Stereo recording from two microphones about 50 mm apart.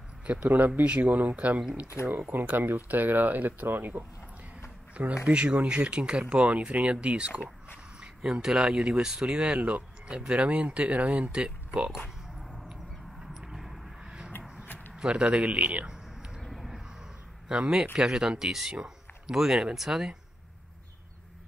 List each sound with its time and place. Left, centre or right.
0.5 s speech: right
0.8 s speech: right
5.2 s speech: right
8.7 s speech: centre
9.5 s speech: right
11.3 s speech: centre
13.2 s a sound: centre
15.0 s speech: centre
16.3 s a sound: centre
17.5 s speech: centre